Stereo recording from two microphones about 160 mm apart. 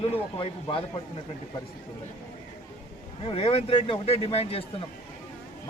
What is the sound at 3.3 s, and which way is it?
Speech, 40° left (ahead or behind).